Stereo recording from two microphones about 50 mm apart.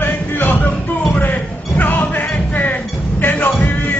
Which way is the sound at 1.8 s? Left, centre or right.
Left.